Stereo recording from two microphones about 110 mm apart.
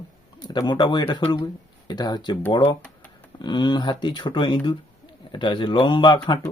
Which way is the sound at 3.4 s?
45° left (ahead or behind).